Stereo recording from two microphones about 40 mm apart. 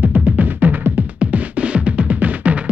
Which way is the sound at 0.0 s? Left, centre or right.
Right.